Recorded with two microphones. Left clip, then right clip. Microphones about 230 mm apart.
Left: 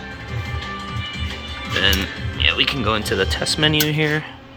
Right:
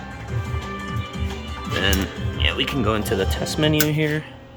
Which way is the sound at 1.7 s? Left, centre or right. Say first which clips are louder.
Left 4 dB; centre.